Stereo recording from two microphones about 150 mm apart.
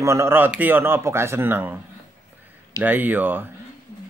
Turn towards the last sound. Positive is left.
turn(degrees=-10)  # may be behind; listen again after turning